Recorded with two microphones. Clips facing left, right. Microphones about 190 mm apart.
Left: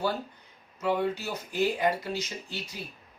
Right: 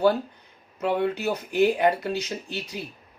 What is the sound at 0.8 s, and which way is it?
Speech, 60° right (ahead or behind).